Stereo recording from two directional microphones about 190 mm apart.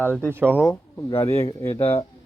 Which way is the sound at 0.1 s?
10° left (ahead or behind).